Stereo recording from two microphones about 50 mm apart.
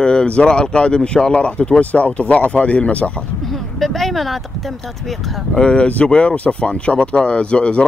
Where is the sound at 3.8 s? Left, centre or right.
Centre.